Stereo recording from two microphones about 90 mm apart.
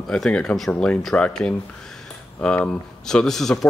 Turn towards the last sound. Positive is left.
turn(degrees=5)  # may be behind; listen again after turning